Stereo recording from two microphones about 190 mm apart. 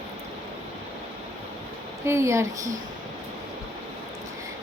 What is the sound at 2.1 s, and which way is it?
Speech, 15° right (ahead or behind).